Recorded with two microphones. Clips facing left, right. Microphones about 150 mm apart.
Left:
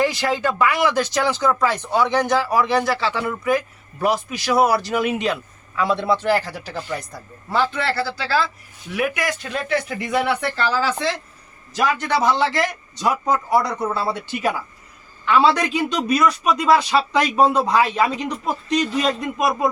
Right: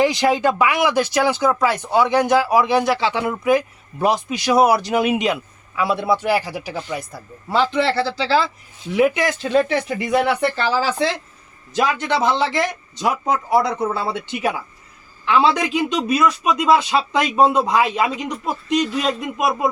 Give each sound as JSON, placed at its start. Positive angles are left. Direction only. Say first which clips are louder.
{"t": 0.0, "sound": "speech", "louder": "right 4 dB", "side_deg": -15}
{"t": 7.5, "sound": "speech", "louder": "right 3 dB", "side_deg": -20}
{"t": 16.6, "sound": "speech", "louder": "right 1 dB", "side_deg": -20}